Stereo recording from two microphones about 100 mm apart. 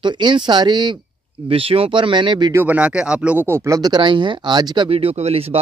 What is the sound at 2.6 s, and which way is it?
Speech, 10° right (ahead or behind).